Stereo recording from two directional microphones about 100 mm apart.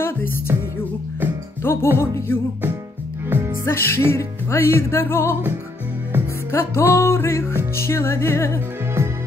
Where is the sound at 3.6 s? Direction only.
25° left (ahead or behind).